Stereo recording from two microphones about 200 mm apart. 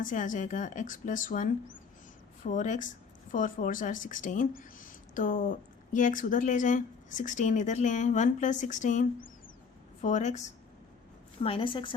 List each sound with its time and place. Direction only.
0.0 s speech: 40° left (ahead or behind)
11.4 s a woman's voice: 25° left (ahead or behind)